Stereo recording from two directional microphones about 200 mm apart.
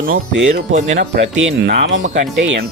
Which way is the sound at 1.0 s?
65° right (ahead or behind).